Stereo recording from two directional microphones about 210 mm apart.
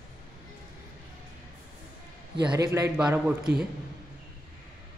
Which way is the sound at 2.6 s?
15° right (ahead or behind).